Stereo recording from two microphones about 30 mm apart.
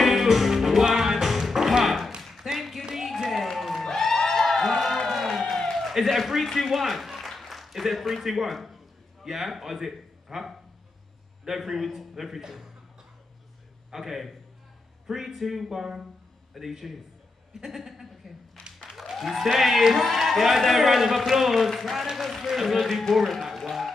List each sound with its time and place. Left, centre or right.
0.0 s music: centre
1.9 s a sound: centre
2.4 s tap: centre
3.5 s music: centre
3.8 s music: centre
4.2 s a sound: centre
5.1 s crowd: centre
5.6 s a sound: centre
5.9 s a man's voice: centre
7.2 s a sound: centre
8.0 s a man's voice: centre
13.8 s a man's voice: centre